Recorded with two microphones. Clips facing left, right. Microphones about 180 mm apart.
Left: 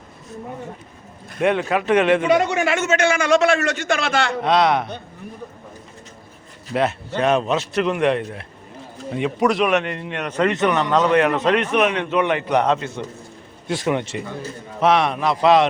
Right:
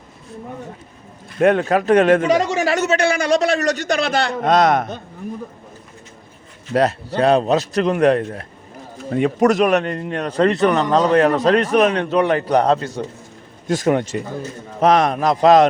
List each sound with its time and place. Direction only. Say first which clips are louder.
1.4 s speech: right 4 dB; 45° right (ahead or behind)
6.7 s speech: right 4 dB; 40° right (ahead or behind)